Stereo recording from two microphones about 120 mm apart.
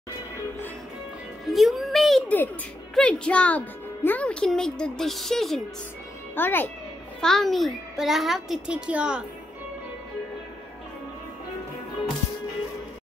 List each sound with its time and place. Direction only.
1.4 s a child's voice: centre (ahead or behind)
2.2 s speech: 15° left (ahead or behind)
6.3 s speech: 15° left (ahead or behind)
7.2 s a child's voice: 5° left (ahead or behind)